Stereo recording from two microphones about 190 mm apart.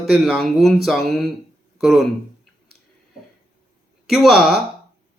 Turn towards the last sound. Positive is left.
turn(degrees=0)  # may be behind; listen again after turning